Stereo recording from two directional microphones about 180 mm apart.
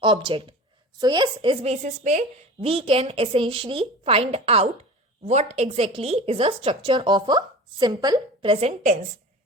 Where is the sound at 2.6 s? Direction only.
30° right (ahead or behind).